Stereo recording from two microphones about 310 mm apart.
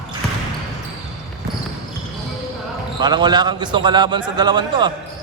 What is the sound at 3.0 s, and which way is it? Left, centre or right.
A man's voice, centre.